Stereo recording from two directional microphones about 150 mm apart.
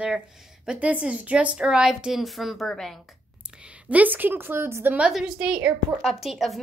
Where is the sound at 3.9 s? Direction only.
10° right (ahead or behind).